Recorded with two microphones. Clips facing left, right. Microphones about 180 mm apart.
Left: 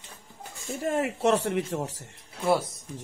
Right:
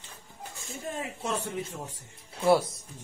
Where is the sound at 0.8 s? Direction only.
80° left.